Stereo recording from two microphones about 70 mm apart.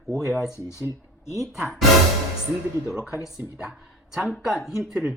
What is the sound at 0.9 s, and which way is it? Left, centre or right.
Speech, right.